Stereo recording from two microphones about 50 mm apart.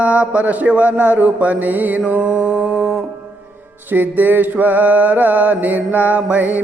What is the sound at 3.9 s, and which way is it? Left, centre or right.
Mantra, right.